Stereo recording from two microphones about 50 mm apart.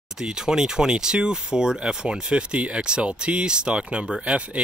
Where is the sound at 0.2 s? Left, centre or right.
Centre.